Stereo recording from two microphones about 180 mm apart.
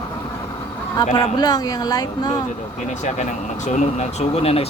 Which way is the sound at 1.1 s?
20° left (ahead or behind).